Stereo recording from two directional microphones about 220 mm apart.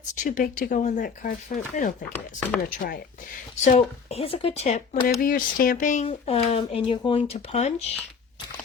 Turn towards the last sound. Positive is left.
turn(degrees=30)  # may be behind; listen again after turning